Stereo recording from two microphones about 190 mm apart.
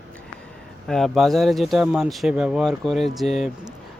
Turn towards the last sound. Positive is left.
turn(degrees=0)  # may be behind; listen again after turning